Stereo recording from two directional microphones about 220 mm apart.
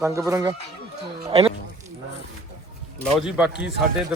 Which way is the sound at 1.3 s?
25° right (ahead or behind).